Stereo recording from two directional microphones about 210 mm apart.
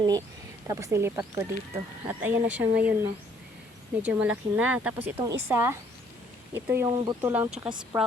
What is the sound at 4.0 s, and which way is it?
Speech, 5° right (ahead or behind).